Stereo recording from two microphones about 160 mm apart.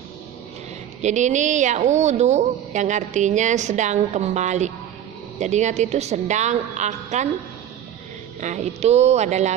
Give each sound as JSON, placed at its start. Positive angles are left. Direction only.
{"t": 1.0, "sound": "a woman's voice", "side_deg": -50}
{"t": 8.4, "sound": "a woman's voice", "side_deg": -45}